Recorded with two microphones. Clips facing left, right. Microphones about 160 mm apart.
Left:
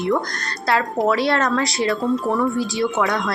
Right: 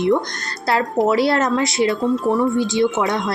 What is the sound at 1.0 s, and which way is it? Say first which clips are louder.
A woman's voice: right 2 dB; 25° right (ahead or behind).